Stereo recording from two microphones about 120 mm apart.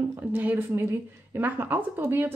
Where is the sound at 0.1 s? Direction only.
15° right (ahead or behind).